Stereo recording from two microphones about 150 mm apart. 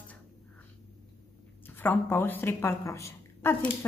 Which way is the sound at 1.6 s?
15° left (ahead or behind).